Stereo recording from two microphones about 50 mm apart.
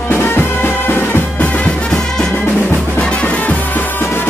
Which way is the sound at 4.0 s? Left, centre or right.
Left.